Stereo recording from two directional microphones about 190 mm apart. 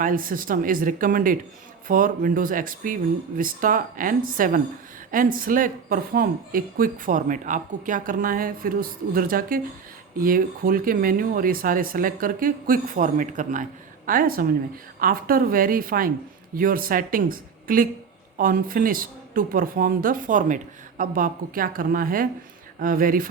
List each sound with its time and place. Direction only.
0.0 s a woman's voice: 45° right (ahead or behind)